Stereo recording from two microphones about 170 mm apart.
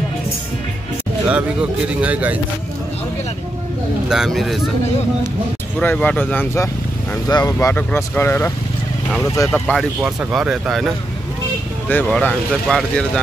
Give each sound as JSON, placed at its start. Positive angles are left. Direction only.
{"t": 1.3, "sound": "speech", "side_deg": -5}
{"t": 4.1, "sound": "speech", "side_deg": 0}
{"t": 5.8, "sound": "speech", "side_deg": 10}
{"t": 7.5, "sound": "speech", "side_deg": 10}
{"t": 9.7, "sound": "speech", "side_deg": 0}
{"t": 11.9, "sound": "speech", "side_deg": 10}